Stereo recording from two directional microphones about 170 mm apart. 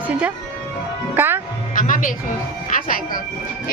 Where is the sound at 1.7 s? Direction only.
50° left (ahead or behind).